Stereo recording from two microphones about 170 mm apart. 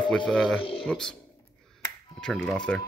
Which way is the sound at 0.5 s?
30° left (ahead or behind).